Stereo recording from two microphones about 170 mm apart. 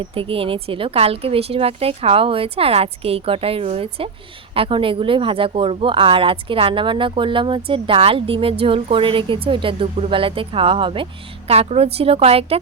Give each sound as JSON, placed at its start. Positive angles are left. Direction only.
{"t": 0.0, "sound": "a woman's voice", "side_deg": -30}